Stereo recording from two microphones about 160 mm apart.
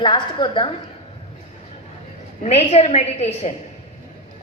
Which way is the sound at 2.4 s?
40° left (ahead or behind).